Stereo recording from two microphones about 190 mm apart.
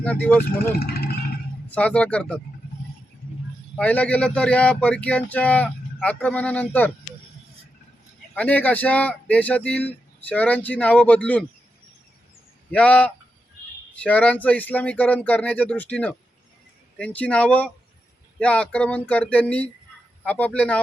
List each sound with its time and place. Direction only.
0.0 s speech: 10° left (ahead or behind)
0.7 s speech: 55° left (ahead or behind)
1.7 s speech: 5° left (ahead or behind)
3.8 s speech: 5° left (ahead or behind)
8.4 s speech: 10° left (ahead or behind)
12.7 s speech: 5° left (ahead or behind)